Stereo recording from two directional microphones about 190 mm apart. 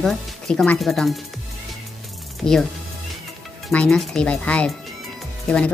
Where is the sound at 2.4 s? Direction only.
Centre (ahead or behind).